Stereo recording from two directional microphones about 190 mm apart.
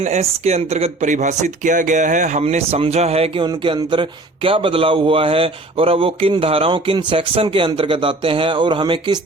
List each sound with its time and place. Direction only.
0.0 s speech: 35° right (ahead or behind)